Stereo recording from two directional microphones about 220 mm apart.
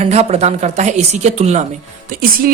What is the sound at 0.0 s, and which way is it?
A woman's voice, 30° right (ahead or behind).